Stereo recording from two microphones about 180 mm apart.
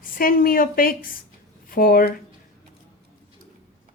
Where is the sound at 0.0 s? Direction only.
50° left (ahead or behind).